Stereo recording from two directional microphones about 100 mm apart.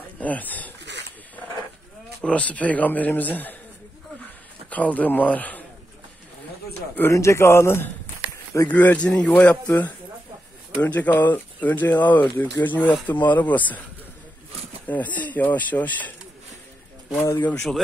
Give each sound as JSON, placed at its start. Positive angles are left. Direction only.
{"t": 0.2, "sound": "speech", "side_deg": 15}
{"t": 2.2, "sound": "speech", "side_deg": 10}
{"t": 4.6, "sound": "a man's voice", "side_deg": 15}
{"t": 7.0, "sound": "a man's voice", "side_deg": 30}
{"t": 14.9, "sound": "speech", "side_deg": 15}
{"t": 17.2, "sound": "a man's voice", "side_deg": 25}
{"t": 17.5, "sound": "speech", "side_deg": 5}